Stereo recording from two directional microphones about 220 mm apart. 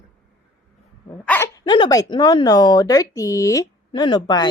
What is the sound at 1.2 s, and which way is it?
Speech, 10° left (ahead or behind).